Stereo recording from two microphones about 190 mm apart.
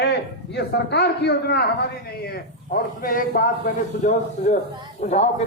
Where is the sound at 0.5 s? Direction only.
60° left (ahead or behind).